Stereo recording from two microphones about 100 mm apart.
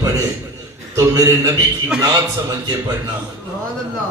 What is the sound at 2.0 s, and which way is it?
Speech, 45° right (ahead or behind).